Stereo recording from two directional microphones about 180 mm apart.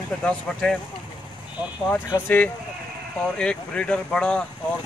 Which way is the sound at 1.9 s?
10° left (ahead or behind).